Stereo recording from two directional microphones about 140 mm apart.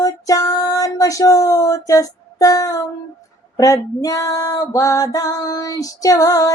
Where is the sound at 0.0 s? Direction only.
25° left (ahead or behind).